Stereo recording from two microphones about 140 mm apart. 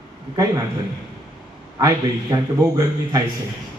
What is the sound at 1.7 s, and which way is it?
Speech, 25° right (ahead or behind).